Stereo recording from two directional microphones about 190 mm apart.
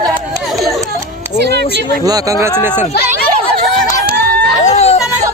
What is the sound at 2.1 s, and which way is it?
Speech, 20° right (ahead or behind).